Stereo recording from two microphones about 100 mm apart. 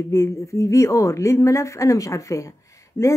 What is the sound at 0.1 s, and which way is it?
Speech, 30° left (ahead or behind).